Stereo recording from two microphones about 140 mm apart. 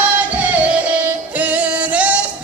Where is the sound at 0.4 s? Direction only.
10° right (ahead or behind).